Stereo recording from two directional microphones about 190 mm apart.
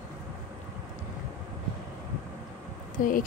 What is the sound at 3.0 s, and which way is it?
Speech, 45° left (ahead or behind).